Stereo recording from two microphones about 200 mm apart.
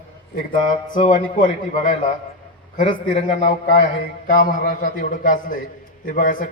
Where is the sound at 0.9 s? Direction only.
40° left (ahead or behind).